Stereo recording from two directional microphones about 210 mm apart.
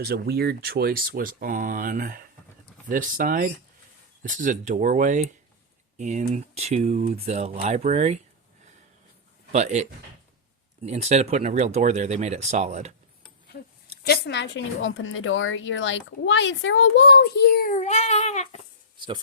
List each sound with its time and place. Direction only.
0.0 s speech: 50° right (ahead or behind); by 8.2 s 30° right (ahead or behind)
9.5 s speech: 35° right (ahead or behind)
14.0 s a woman's voice: 50° left (ahead or behind); by 18.6 s 30° left (ahead or behind)
18.9 s speech: 20° right (ahead or behind)